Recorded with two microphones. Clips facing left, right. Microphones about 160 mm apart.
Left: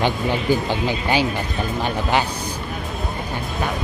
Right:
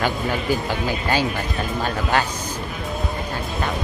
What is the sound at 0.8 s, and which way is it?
Speech, 15° left (ahead or behind).